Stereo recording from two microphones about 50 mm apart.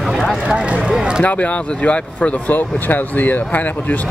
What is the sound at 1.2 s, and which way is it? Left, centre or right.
Speech, left.